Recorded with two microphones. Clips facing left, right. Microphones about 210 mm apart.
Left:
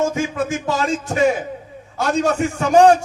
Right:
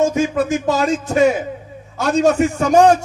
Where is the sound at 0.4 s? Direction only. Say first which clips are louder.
Right 4 dB; 40° right (ahead or behind).